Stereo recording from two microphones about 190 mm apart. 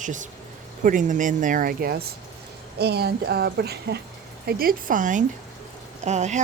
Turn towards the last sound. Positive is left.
turn(degrees=-35)  # may be behind; listen again after turning